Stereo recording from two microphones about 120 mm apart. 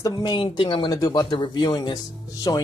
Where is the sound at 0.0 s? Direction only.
35° left (ahead or behind).